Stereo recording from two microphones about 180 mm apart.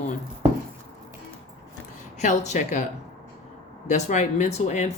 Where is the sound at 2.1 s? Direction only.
40° left (ahead or behind).